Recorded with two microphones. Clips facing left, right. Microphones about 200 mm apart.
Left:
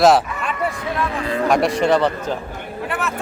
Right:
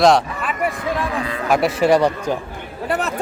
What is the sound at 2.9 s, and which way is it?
Chatter, 35° right (ahead or behind).